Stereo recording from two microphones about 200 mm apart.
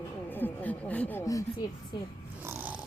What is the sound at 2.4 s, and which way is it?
Cat, 10° right (ahead or behind).